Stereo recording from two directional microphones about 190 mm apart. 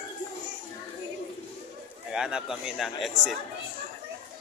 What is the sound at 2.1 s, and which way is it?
Speech, 5° right (ahead or behind).